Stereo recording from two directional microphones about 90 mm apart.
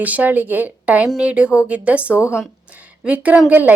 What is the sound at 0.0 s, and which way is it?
Speech, 15° right (ahead or behind).